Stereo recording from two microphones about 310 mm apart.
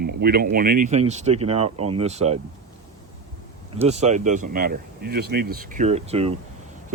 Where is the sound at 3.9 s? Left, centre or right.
Right.